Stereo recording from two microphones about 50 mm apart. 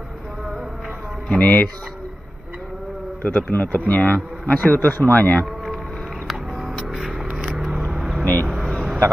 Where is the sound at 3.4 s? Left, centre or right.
Left.